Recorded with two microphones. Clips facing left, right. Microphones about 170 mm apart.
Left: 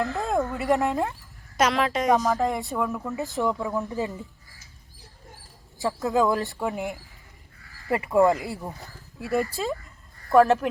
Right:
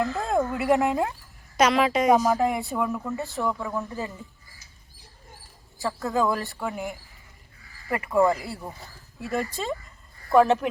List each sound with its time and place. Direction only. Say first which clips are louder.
0.0 s a woman's voice: right 1 dB; centre (ahead or behind)
3.2 s speech: left 2 dB; 15° left (ahead or behind)
6.3 s speech: left 3 dB; 20° left (ahead or behind)
7.9 s speech: left 2 dB; 20° left (ahead or behind)
9.3 s a woman's voice: left 3 dB; centre (ahead or behind)